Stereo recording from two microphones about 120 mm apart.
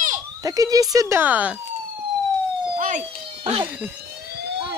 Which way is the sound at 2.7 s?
90° right.